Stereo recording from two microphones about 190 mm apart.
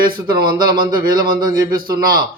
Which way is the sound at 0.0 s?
50° right (ahead or behind).